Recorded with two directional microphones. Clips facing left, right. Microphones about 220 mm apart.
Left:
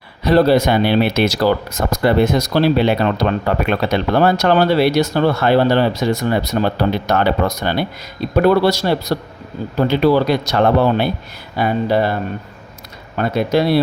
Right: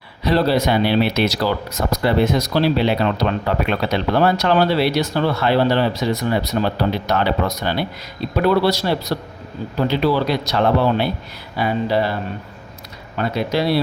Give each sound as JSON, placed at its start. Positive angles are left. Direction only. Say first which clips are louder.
{"t": 0.3, "sound": "speech", "louder": "left 4 dB", "side_deg": 50}
{"t": 13.1, "sound": "speech", "louder": "left 4 dB", "side_deg": 50}